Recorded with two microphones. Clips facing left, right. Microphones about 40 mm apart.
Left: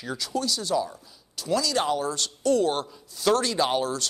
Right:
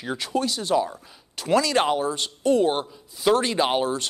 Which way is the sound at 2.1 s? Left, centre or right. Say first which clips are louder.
Right 2 dB; right.